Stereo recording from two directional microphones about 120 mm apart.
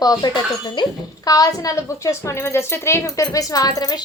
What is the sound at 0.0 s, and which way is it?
A child's voice, 30° left (ahead or behind).